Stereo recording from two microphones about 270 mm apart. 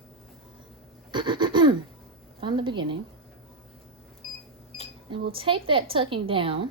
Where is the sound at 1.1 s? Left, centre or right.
Centre.